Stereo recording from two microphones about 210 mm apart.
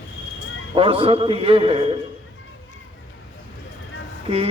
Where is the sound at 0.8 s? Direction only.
25° right (ahead or behind).